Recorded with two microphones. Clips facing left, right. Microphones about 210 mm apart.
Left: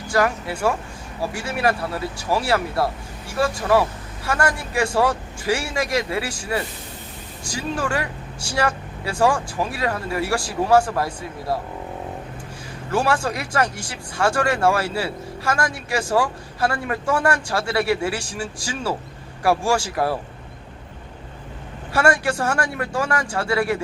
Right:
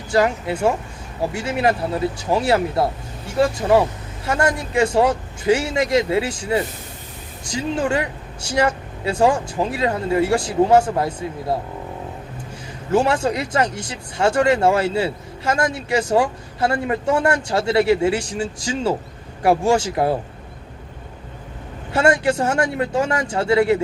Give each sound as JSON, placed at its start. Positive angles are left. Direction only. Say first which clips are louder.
{"t": 0.1, "sound": "speech", "louder": "right 3 dB", "side_deg": -20}
{"t": 12.9, "sound": "speech", "louder": "right 4 dB", "side_deg": -20}
{"t": 21.9, "sound": "speech", "louder": "right 3 dB", "side_deg": -20}